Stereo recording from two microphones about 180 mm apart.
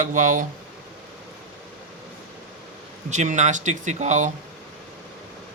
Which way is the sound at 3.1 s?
40° right (ahead or behind).